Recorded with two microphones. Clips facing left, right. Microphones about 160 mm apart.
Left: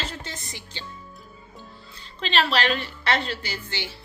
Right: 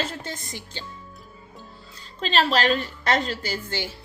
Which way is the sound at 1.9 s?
40° right (ahead or behind).